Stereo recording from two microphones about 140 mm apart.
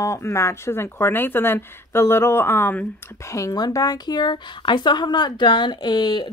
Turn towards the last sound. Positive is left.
turn(degrees=30)  # may be behind; listen again after turning